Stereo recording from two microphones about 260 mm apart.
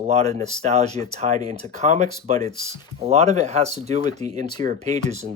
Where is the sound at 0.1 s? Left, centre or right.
Right.